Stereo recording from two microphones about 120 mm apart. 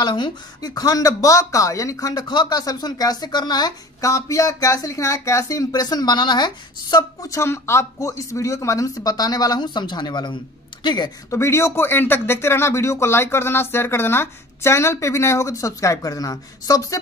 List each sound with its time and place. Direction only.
0.0 s speech: 40° left (ahead or behind)
11.2 s speech: 20° left (ahead or behind)